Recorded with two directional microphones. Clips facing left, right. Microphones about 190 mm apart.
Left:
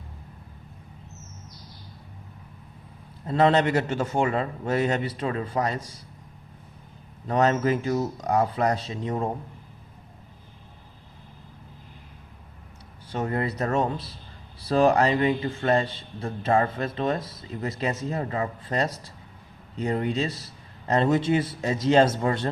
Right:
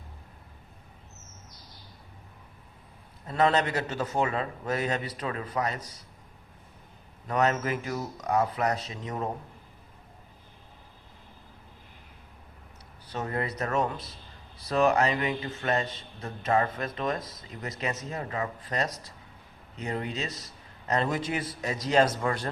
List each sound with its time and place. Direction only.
3.2 s a man's voice: 30° left (ahead or behind)
7.3 s a man's voice: 30° left (ahead or behind)
13.1 s a man's voice: 25° left (ahead or behind)